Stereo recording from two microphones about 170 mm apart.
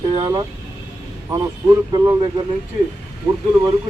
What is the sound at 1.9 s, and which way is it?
Speech, 25° right (ahead or behind).